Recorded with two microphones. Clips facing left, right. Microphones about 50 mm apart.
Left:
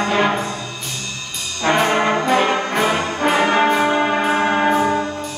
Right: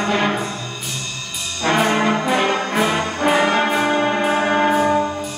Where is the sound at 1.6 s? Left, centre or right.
Centre.